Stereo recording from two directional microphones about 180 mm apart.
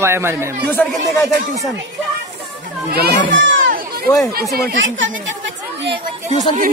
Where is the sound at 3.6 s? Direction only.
50° right (ahead or behind).